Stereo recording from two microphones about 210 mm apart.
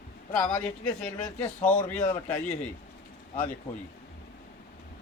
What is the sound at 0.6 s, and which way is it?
Speech, 5° left (ahead or behind).